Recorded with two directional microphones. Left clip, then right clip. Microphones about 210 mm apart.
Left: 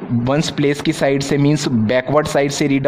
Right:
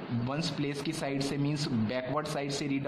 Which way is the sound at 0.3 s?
45° left (ahead or behind).